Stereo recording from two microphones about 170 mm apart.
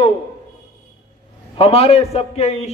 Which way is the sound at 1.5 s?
35° left (ahead or behind).